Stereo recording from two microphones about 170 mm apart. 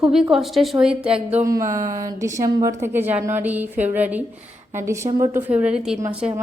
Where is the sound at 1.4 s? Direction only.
20° right (ahead or behind).